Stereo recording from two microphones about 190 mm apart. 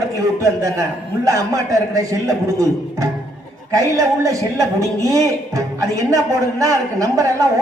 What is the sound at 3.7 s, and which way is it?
Music, 20° right (ahead or behind).